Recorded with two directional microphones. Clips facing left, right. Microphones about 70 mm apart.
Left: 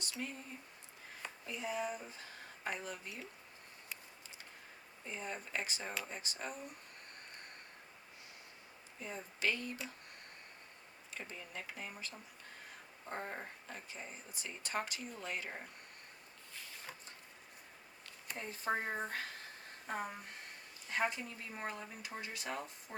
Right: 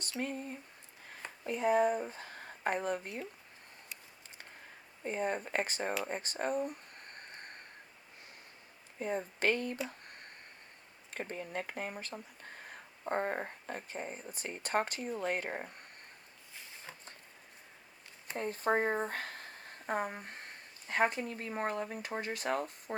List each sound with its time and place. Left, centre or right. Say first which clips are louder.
0.2 s a sound: right 8 dB; right
1.5 s speech: right 11 dB; right
5.0 s speech: right 10 dB; right
6.1 s a sound: right 9 dB; right
9.0 s speech: right 8 dB; right
11.1 s speech: right 8 dB; right
18.3 s speech: right 7 dB; right